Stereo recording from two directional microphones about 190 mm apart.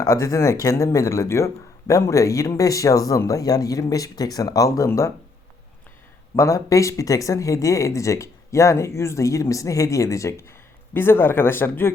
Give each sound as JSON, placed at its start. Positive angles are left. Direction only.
{"t": 0.0, "sound": "speech", "side_deg": 15}
{"t": 6.3, "sound": "speech", "side_deg": 15}